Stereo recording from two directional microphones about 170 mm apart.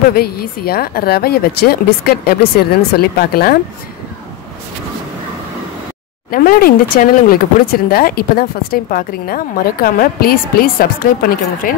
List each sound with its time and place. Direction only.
0.1 s speech: 65° left (ahead or behind)
6.3 s speech: 55° left (ahead or behind)